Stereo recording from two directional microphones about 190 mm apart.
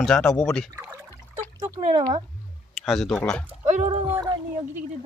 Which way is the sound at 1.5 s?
30° right (ahead or behind).